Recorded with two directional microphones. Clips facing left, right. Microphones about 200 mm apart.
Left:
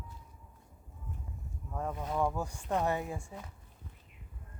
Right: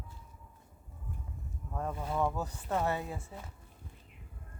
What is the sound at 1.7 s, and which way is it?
Speech, centre (ahead or behind).